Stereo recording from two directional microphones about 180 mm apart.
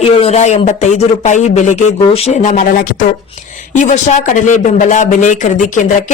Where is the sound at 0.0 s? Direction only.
35° left (ahead or behind).